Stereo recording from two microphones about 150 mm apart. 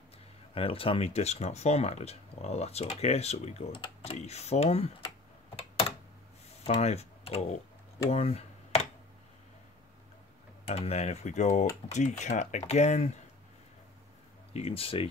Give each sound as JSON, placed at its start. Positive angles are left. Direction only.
{"t": 0.6, "sound": "speech", "side_deg": 40}
{"t": 6.8, "sound": "speech", "side_deg": 45}
{"t": 8.1, "sound": "tick-tock", "side_deg": 45}
{"t": 10.7, "sound": "speech", "side_deg": 45}
{"t": 14.5, "sound": "speech", "side_deg": 40}